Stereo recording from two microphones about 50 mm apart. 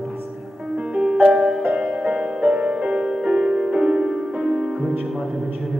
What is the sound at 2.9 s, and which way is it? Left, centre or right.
Music, centre.